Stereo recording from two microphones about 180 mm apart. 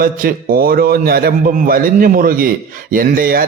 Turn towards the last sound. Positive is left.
turn(degrees=-55)  # may be behind; listen again after turning